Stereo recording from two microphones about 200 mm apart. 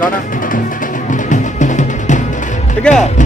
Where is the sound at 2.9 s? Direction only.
5° left (ahead or behind).